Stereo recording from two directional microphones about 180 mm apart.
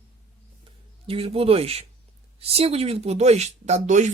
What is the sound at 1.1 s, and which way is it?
Speech, 30° right (ahead or behind).